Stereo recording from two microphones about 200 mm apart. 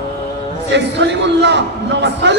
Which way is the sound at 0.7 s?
60° right (ahead or behind).